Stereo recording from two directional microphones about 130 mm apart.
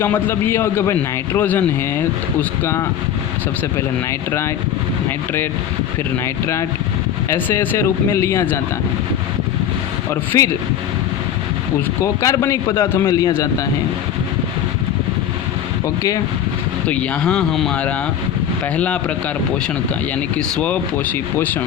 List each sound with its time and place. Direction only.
0.0 s a man's voice: 15° left (ahead or behind)
5.0 s speech: 15° left (ahead or behind)
7.3 s speech: 20° left (ahead or behind)
10.3 s speech: 25° left (ahead or behind)
12.0 s speech: 25° left (ahead or behind)
16.9 s speech: 5° left (ahead or behind)
20.6 s a man's voice: 10° left (ahead or behind)